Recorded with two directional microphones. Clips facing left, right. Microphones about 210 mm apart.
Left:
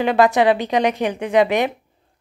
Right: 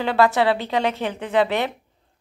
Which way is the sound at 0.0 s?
15° left (ahead or behind).